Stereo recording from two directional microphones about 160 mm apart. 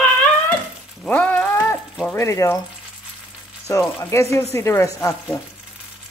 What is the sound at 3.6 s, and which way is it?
Speech, 15° left (ahead or behind).